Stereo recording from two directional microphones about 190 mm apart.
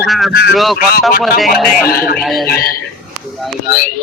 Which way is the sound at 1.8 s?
50° left (ahead or behind).